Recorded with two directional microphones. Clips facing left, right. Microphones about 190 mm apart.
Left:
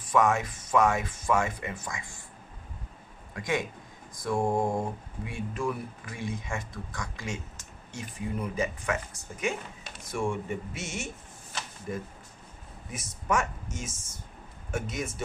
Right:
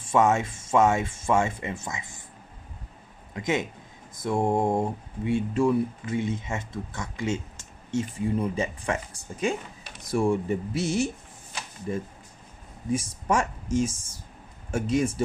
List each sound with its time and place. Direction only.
0.0 s speech: 25° right (ahead or behind)
3.3 s speech: 20° right (ahead or behind)